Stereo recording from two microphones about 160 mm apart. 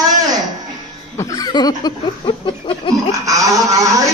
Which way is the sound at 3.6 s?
20° right (ahead or behind).